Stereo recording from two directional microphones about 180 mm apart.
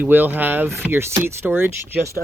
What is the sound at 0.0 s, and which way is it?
Speech, 10° right (ahead or behind).